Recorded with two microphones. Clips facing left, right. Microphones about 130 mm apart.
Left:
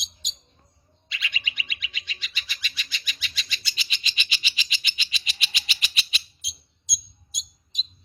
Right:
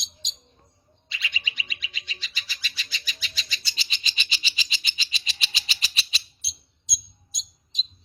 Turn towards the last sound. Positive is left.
turn(degrees=-35)  # may be behind; listen again after turning